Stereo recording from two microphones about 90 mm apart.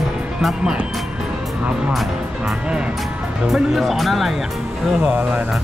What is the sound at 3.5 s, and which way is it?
Speech, centre (ahead or behind).